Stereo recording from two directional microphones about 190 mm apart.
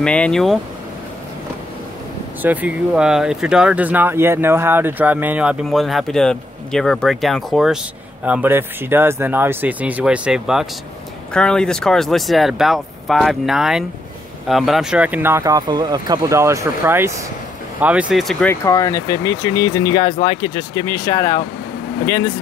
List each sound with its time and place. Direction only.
0.0 s speech: 5° left (ahead or behind)
2.4 s speech: 10° right (ahead or behind)
18.5 s speech: 15° left (ahead or behind)